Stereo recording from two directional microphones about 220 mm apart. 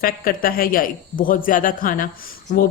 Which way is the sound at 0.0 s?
40° left (ahead or behind).